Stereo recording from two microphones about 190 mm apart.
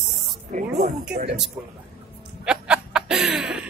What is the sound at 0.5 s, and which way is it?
Speech, 40° right (ahead or behind).